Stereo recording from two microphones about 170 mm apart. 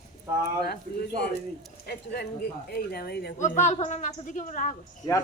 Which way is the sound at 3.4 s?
45° left (ahead or behind).